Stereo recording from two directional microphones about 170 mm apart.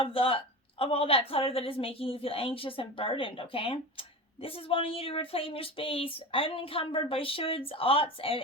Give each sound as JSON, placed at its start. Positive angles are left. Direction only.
{"t": 0.0, "sound": "a woman's voice", "side_deg": 35}